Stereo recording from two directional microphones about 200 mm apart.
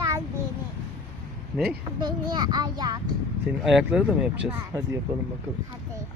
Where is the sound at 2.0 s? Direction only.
20° right (ahead or behind).